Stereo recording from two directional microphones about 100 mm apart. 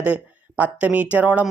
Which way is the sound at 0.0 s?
15° right (ahead or behind).